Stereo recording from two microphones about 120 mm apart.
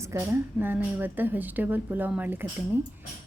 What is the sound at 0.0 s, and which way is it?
A woman's voice, 20° right (ahead or behind).